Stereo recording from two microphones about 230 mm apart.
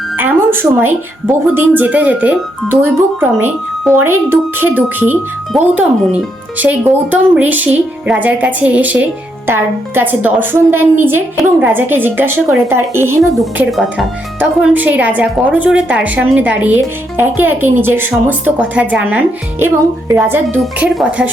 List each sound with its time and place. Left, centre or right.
0.2 s a woman's voice: centre
13.3 s a woman's voice: centre